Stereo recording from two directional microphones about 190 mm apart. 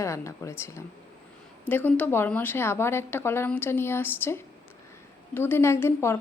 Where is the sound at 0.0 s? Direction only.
15° left (ahead or behind).